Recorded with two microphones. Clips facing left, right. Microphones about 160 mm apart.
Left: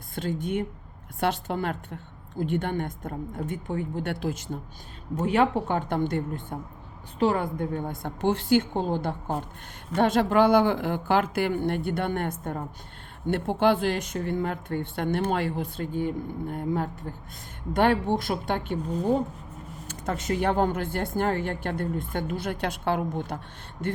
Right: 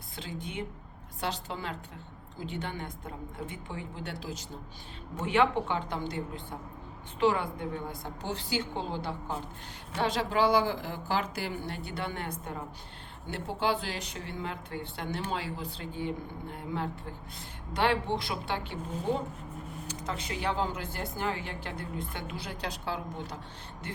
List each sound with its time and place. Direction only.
0.2 s a woman's voice: 50° left (ahead or behind)
5.2 s speech: 40° left (ahead or behind)
7.2 s a woman's voice: 40° left (ahead or behind)
18.2 s speech: 45° left (ahead or behind)